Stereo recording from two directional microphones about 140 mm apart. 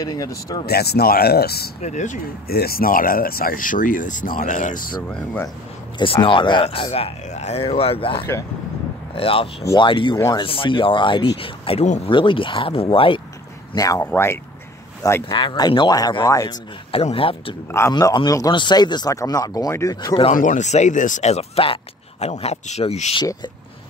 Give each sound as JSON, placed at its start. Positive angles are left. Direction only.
{"t": 0.0, "sound": "speech", "side_deg": 25}
{"t": 1.0, "sound": "speech", "side_deg": 90}
{"t": 5.0, "sound": "speech", "side_deg": 10}
{"t": 5.9, "sound": "speech", "side_deg": 40}
{"t": 10.1, "sound": "speech", "side_deg": 25}
{"t": 10.4, "sound": "speech", "side_deg": 40}
{"t": 13.7, "sound": "speech", "side_deg": 20}
{"t": 15.3, "sound": "speech", "side_deg": 30}
{"t": 16.9, "sound": "speech", "side_deg": 40}
{"t": 17.6, "sound": "speech", "side_deg": 20}
{"t": 20.3, "sound": "speech", "side_deg": 60}